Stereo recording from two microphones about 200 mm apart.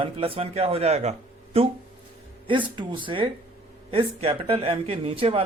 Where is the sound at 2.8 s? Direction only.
25° right (ahead or behind).